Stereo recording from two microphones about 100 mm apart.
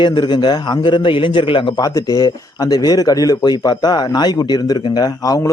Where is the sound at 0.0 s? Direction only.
50° left (ahead or behind).